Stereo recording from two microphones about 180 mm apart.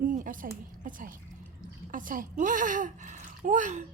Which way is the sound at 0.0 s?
50° right (ahead or behind).